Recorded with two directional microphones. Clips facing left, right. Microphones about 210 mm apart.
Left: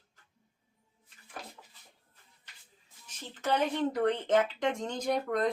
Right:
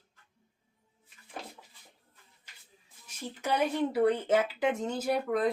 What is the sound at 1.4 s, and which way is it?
Dishes, 25° right (ahead or behind).